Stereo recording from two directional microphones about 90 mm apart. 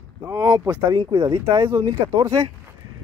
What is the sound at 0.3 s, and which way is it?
Speech, 30° right (ahead or behind).